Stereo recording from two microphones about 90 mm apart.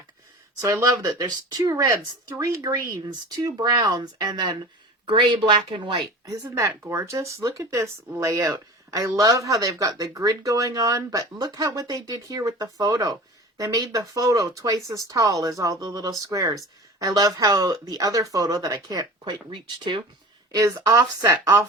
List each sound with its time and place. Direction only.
0.6 s speech: 40° right (ahead or behind); by 6.0 s 60° right (ahead or behind)
6.2 s speech: 35° right (ahead or behind); by 19.4 s 50° right (ahead or behind)
19.5 s speech: 65° right (ahead or behind)
20.8 s speech: 40° right (ahead or behind)